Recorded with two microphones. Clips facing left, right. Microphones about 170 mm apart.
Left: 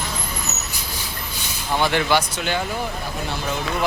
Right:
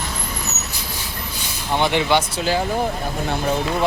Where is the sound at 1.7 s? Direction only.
20° right (ahead or behind); by 3.4 s 50° right (ahead or behind).